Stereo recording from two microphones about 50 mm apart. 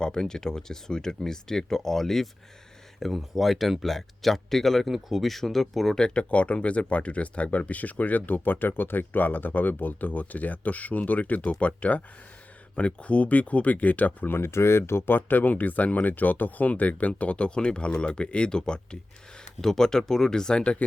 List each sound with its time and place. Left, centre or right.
0.0 s speech: centre
6.0 s speech: centre; by 14.3 s left
14.3 s speech: left; by 20.7 s centre